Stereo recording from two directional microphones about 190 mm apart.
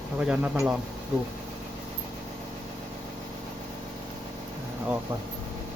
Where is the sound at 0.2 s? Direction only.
10° right (ahead or behind).